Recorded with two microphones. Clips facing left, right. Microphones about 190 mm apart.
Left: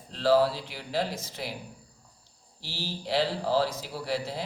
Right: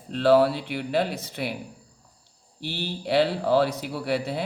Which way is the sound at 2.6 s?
60° right (ahead or behind).